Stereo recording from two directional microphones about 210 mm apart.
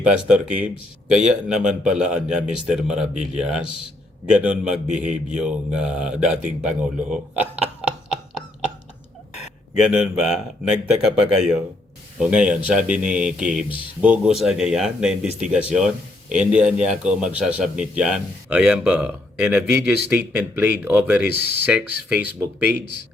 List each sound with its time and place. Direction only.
0.0 s a man's voice: 5° right (ahead or behind)
7.8 s a sound: 5° right (ahead or behind)
9.8 s a man's voice: 5° right (ahead or behind)
15.3 s speech: 35° right (ahead or behind)
15.5 s a man's voice: 5° right (ahead or behind)